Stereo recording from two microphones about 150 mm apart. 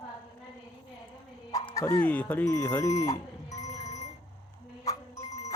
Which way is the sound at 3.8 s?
50° left (ahead or behind).